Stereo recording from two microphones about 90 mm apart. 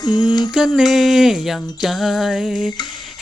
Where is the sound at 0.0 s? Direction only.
50° left (ahead or behind).